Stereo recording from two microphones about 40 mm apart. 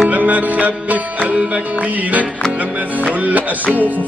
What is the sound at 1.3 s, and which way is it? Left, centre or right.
Music, right.